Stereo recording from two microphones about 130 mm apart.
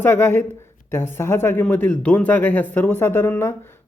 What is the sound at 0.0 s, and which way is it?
Speech, 15° left (ahead or behind).